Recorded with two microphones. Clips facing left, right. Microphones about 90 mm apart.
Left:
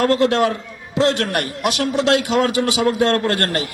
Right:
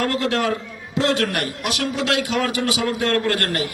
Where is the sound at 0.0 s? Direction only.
25° left (ahead or behind).